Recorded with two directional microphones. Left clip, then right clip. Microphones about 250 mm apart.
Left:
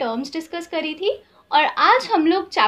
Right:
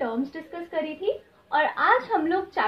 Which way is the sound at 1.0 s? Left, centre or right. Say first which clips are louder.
Left 5 dB; left.